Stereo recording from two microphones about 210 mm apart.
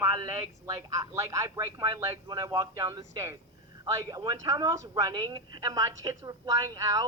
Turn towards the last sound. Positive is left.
turn(degrees=-15)  # may be behind; listen again after turning